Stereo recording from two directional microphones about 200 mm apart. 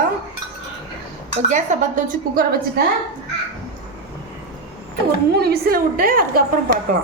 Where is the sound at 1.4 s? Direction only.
40° right (ahead or behind).